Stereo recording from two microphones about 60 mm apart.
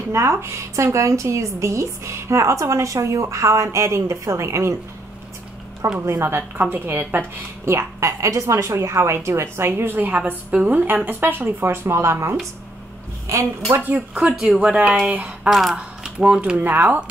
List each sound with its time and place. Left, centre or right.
0.1 s a woman's voice: right
5.9 s speech: right
13.3 s a woman's voice: right
13.7 s speech: right
14.1 s speech: centre
14.6 s speech: centre
16.6 s speech: right